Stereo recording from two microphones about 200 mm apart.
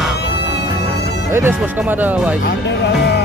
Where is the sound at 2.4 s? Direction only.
60° left (ahead or behind).